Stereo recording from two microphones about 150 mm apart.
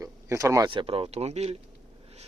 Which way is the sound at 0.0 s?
20° right (ahead or behind).